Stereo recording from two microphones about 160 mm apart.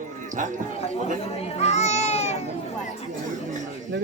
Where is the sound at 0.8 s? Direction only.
40° left (ahead or behind).